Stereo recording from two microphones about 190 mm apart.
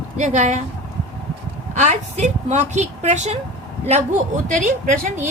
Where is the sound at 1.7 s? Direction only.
40° right (ahead or behind).